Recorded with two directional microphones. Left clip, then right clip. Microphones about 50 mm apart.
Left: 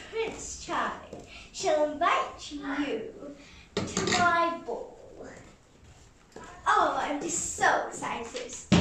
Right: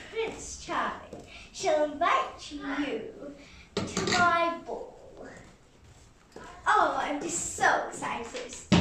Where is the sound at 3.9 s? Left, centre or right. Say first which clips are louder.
Even; left.